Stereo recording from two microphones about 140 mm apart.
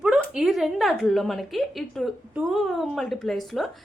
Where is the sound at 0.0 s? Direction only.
5° right (ahead or behind).